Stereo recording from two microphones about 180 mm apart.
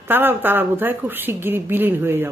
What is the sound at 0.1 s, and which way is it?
A woman's voice, 10° right (ahead or behind).